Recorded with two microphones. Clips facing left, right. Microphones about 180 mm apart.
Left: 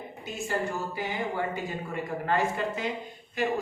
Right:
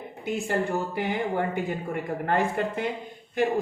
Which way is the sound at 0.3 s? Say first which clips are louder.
Right 5 dB; 60° right (ahead or behind).